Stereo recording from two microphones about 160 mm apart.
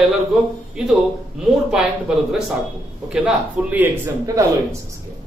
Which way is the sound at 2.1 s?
5° right (ahead or behind).